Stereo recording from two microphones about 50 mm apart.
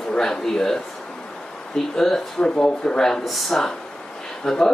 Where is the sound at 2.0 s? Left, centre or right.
Centre.